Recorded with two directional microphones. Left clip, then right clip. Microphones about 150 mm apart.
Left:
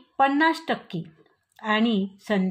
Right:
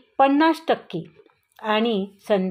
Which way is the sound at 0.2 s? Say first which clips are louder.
Right 3 dB; 35° right (ahead or behind).